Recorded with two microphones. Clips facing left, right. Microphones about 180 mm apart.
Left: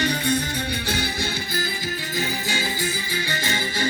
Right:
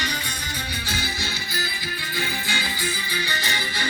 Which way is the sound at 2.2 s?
40° left (ahead or behind).